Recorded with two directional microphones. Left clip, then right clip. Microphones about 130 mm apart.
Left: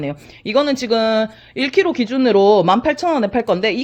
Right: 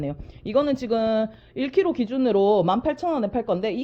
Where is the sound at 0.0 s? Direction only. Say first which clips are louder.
Left 6 dB; 25° left (ahead or behind).